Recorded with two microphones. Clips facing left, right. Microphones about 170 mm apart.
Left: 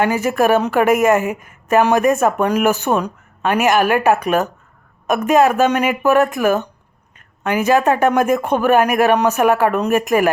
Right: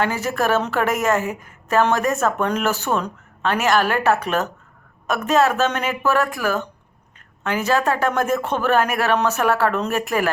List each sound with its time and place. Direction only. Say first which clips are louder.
0.0 s a woman's voice: left 5 dB; 15° left (ahead or behind)